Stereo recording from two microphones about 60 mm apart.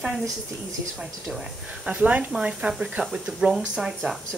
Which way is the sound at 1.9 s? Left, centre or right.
Right.